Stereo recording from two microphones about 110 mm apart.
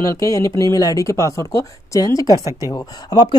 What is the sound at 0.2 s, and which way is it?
Speech, 30° left (ahead or behind).